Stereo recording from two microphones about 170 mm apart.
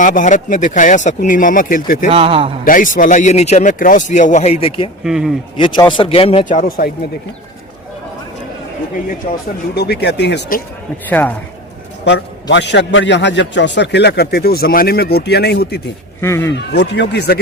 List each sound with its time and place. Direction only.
0.0 s speech: 50° left (ahead or behind)
2.0 s a man's voice: 35° right (ahead or behind)
2.6 s speech: 50° left (ahead or behind)
5.0 s speech: 5° right (ahead or behind)
5.5 s a man's voice: 25° left (ahead or behind)
6.4 s speech: 50° left (ahead or behind)
9.7 s speech: 70° left (ahead or behind)
11.1 s speech: 10° left (ahead or behind)
12.0 s a man's voice: 90° left; by 15.8 s 75° left (ahead or behind)
16.2 s speech: 15° left (ahead or behind)
16.7 s speech: 90° left